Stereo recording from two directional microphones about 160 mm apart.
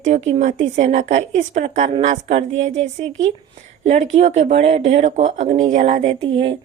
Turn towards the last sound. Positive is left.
turn(degrees=-35)  # may be behind; listen again after turning